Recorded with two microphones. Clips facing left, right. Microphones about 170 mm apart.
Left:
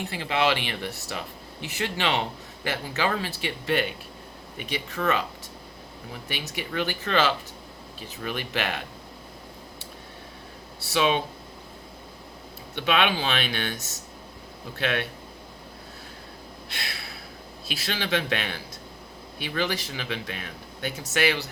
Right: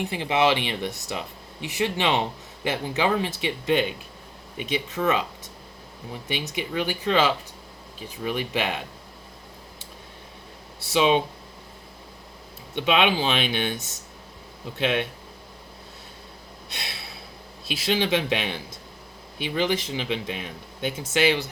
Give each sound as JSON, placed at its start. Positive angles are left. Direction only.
{"t": 0.1, "sound": "speech", "side_deg": -20}
{"t": 6.2, "sound": "speech", "side_deg": -20}
{"t": 10.8, "sound": "speech", "side_deg": -20}
{"t": 12.7, "sound": "speech", "side_deg": -20}
{"t": 14.8, "sound": "speech", "side_deg": -20}
{"t": 16.8, "sound": "a sound", "side_deg": -25}
{"t": 17.7, "sound": "speech", "side_deg": -20}